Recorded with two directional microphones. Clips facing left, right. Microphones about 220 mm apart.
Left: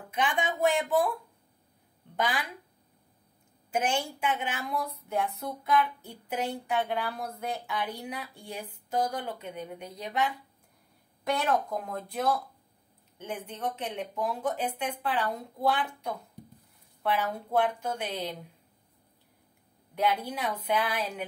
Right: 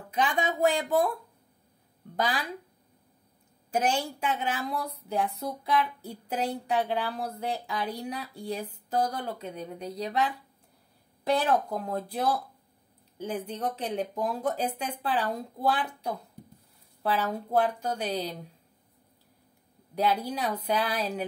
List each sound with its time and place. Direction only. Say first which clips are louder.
0.1 s a woman's voice: right 2 dB; 35° right (ahead or behind)
2.1 s speech: right 1 dB; 35° right (ahead or behind)
3.7 s a woman's voice: right 2 dB; 35° right (ahead or behind)
20.0 s a woman's voice: right 2 dB; 35° right (ahead or behind)